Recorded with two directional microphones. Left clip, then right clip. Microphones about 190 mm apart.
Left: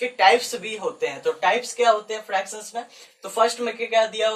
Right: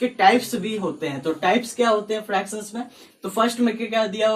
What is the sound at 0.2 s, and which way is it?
Speech, 15° left (ahead or behind).